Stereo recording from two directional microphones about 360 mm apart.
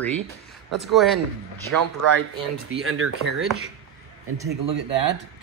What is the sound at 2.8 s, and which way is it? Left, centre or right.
Speech, right.